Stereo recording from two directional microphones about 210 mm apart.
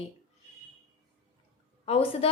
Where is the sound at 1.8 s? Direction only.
30° left (ahead or behind).